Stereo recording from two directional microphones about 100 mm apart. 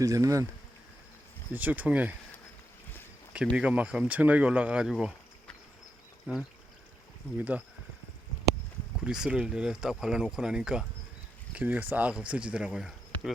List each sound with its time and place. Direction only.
0.0 s speech: 35° right (ahead or behind)
1.5 s speech: 15° right (ahead or behind)
3.5 s speech: 10° right (ahead or behind)
6.3 s speech: 15° right (ahead or behind)
9.0 s speech: 5° right (ahead or behind)